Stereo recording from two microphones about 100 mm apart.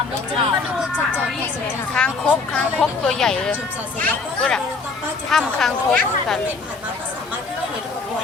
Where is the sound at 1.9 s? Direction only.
10° left (ahead or behind).